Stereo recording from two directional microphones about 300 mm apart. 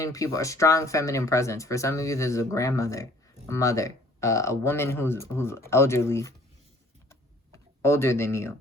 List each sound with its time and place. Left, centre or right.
0.0 s speech: centre
7.8 s speech: centre